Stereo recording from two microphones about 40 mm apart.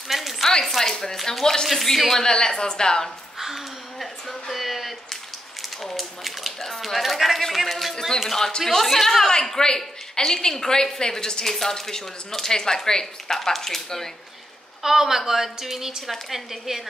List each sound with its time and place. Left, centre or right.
0.1 s a sound: centre
0.7 s a woman's voice: centre
3.3 s a sound: centre
4.3 s speech: centre
8.2 s a woman's voice: centre
14.8 s a woman's voice: centre